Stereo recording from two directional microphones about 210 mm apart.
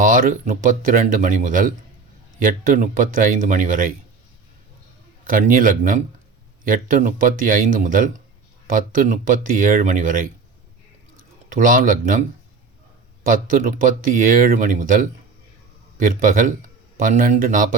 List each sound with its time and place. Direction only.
0.0 s speech: 40° right (ahead or behind)
5.2 s speech: 40° right (ahead or behind)
11.4 s speech: 40° right (ahead or behind)
13.2 s speech: 40° right (ahead or behind)